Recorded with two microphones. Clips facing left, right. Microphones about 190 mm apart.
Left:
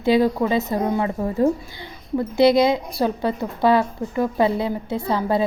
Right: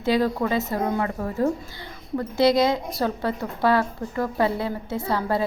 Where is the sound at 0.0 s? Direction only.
15° left (ahead or behind).